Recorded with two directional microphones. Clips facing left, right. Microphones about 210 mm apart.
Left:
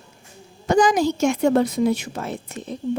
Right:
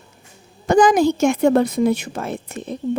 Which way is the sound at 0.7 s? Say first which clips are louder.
Right 4 dB; 55° right (ahead or behind).